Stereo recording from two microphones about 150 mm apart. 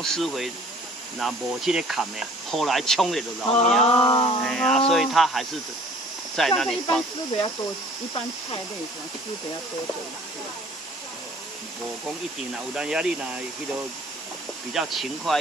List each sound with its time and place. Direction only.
0.0 s speech: centre (ahead or behind)
3.4 s a sound: 45° left (ahead or behind)
3.8 s music: 35° left (ahead or behind)
4.5 s speech: 5° left (ahead or behind)
12.7 s speech: 5° right (ahead or behind)
14.7 s speech: centre (ahead or behind)